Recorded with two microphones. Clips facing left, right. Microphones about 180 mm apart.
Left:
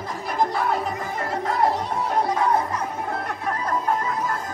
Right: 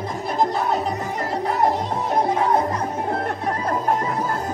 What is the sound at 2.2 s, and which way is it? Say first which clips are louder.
Music: right 2 dB; 20° right (ahead or behind).